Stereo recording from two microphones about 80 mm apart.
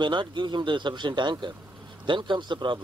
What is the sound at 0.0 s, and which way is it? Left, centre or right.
Speech, right.